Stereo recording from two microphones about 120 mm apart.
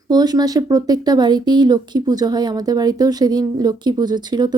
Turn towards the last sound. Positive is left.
turn(degrees=-35)  # may be behind; listen again after turning